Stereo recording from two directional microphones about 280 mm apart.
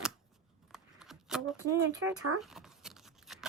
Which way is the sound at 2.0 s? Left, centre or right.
Right.